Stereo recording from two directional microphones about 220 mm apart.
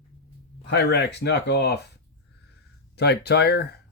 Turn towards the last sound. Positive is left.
turn(degrees=45)  # may be behind; listen again after turning